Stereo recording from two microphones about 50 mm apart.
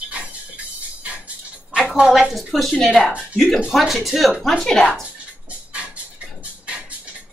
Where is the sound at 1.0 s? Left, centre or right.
Right.